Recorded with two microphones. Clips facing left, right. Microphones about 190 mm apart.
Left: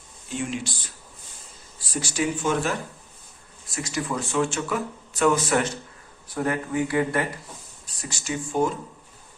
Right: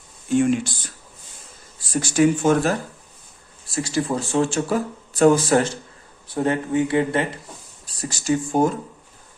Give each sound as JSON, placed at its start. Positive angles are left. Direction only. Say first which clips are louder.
{"t": 0.3, "sound": "speech", "louder": "right 11 dB", "side_deg": -50}
{"t": 1.9, "sound": "speech", "louder": "right 9 dB", "side_deg": -50}
{"t": 3.7, "sound": "speech", "louder": "right 6 dB", "side_deg": -30}
{"t": 8.0, "sound": "speech", "louder": "right 9 dB", "side_deg": -40}